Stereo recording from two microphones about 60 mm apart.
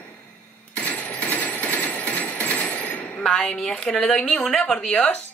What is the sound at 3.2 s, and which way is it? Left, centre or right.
A woman's voice, centre.